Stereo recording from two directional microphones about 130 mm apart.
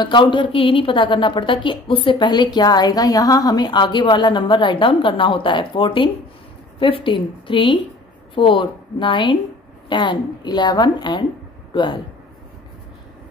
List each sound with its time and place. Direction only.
0.0 s a woman's voice: 40° left (ahead or behind)